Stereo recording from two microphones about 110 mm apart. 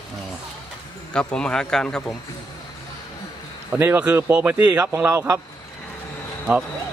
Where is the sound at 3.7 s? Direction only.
15° right (ahead or behind).